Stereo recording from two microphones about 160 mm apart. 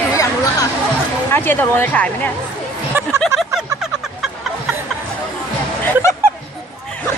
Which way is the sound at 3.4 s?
5° right (ahead or behind).